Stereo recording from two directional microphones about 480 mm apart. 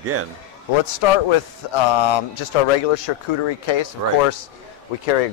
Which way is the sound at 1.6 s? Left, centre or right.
Left.